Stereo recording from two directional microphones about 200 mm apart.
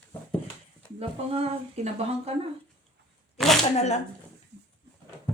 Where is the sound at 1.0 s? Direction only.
30° right (ahead or behind).